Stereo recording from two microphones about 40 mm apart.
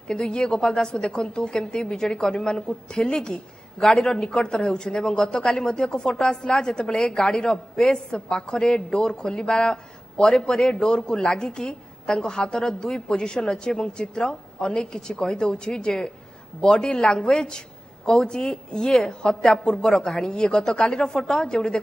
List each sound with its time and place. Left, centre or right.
0.2 s a woman's voice: centre
3.8 s speech: centre
4.1 s a woman's voice: centre